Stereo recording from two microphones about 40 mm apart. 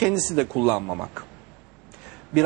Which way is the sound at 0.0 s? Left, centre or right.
Centre.